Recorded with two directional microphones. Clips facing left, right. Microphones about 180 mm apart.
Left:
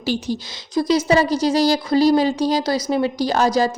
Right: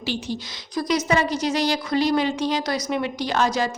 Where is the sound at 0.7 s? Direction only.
30° left (ahead or behind).